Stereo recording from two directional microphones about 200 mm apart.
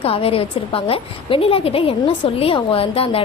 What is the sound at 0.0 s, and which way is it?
A woman's voice, 30° left (ahead or behind).